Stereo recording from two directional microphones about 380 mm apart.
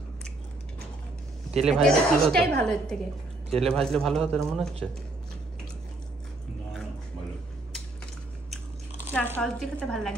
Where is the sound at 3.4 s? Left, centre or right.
Centre.